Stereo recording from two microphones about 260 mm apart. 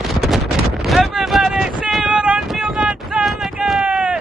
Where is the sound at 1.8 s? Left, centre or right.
Centre.